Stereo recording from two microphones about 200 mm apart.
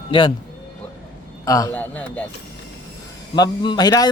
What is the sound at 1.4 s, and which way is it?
Speech, 15° left (ahead or behind).